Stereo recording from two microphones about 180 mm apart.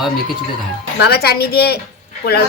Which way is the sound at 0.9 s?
60° left (ahead or behind).